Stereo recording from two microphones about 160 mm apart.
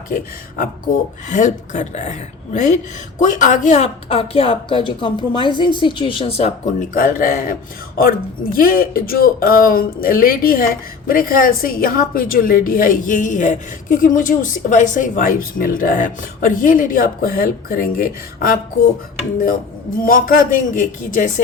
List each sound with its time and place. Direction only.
1.3 s a woman's voice: 50° left (ahead or behind)
6.9 s a woman's voice: 55° left (ahead or behind)
8.5 s a woman's voice: 65° left (ahead or behind)
20.0 s a woman's voice: 60° left (ahead or behind)